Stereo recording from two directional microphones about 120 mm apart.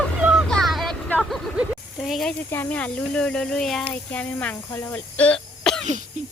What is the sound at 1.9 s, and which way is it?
Speech, centre (ahead or behind).